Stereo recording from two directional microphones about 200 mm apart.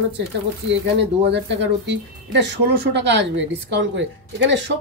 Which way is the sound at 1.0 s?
60° right (ahead or behind).